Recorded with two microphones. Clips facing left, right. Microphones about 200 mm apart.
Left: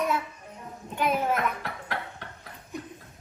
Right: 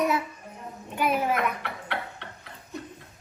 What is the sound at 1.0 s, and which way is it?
Speech, 10° right (ahead or behind).